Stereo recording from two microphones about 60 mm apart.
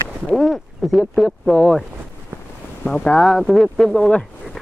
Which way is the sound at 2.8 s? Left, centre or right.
Left.